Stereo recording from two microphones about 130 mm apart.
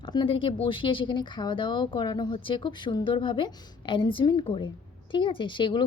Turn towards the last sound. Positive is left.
turn(degrees=35)  # may be behind; listen again after turning